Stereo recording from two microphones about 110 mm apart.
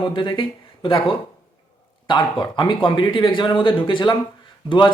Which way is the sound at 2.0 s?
45° left (ahead or behind).